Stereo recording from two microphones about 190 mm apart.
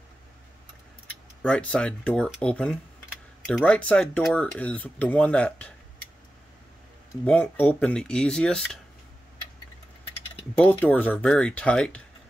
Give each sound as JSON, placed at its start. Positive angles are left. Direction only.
{"t": 1.4, "sound": "speech", "side_deg": 5}
{"t": 7.2, "sound": "speech", "side_deg": 5}
{"t": 10.6, "sound": "speech", "side_deg": 10}